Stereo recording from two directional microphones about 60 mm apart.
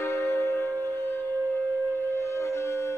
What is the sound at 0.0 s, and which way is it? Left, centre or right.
Music, left.